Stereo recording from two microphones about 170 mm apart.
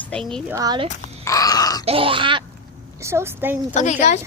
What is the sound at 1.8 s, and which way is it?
Grunt, 30° right (ahead or behind).